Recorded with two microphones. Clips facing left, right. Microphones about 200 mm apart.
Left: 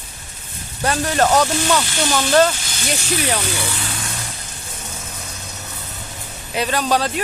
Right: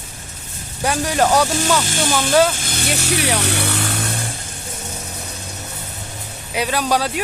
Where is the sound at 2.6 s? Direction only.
55° right (ahead or behind).